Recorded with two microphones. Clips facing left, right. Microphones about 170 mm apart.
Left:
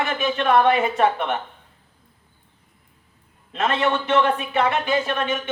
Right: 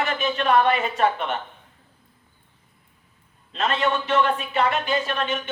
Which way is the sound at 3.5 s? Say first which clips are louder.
Left 2 dB; 55° left (ahead or behind).